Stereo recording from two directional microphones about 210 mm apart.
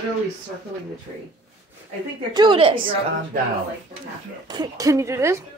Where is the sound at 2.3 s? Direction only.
20° right (ahead or behind).